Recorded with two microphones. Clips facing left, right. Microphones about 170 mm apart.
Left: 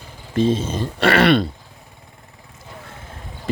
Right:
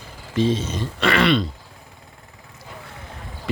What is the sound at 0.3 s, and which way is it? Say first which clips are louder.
Speech: left 2 dB; 50° left (ahead or behind).